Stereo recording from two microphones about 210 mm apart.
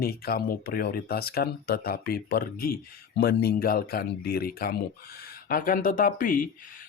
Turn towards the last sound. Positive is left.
turn(degrees=40)  # may be behind; listen again after turning